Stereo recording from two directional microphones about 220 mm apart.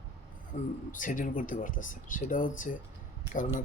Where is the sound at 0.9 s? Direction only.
35° left (ahead or behind).